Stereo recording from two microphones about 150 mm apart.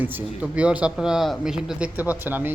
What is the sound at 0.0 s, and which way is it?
Speech, 10° right (ahead or behind).